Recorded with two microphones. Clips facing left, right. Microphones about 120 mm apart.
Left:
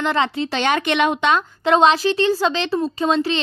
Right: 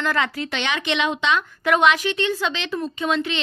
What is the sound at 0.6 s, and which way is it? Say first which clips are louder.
Speech: left 6 dB; 50° left (ahead or behind).